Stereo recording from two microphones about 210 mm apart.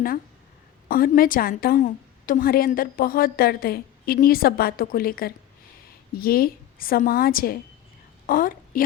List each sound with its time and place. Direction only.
0.9 s a woman's voice: 45° left (ahead or behind)